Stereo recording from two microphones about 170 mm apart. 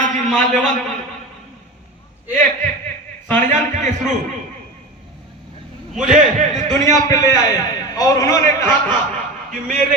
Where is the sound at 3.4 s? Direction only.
45° right (ahead or behind).